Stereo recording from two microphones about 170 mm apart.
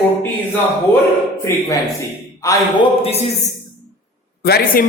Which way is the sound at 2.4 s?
20° left (ahead or behind).